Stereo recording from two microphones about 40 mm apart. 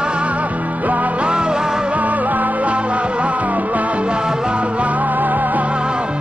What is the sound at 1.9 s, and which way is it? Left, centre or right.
Music, right.